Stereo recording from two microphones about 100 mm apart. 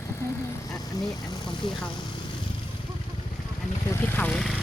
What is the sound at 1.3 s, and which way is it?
Speech, 50° left (ahead or behind).